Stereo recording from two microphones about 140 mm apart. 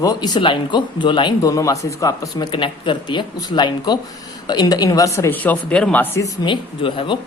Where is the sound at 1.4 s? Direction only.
25° left (ahead or behind).